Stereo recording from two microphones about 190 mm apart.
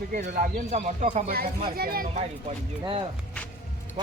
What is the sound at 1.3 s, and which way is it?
Speech, 50° right (ahead or behind).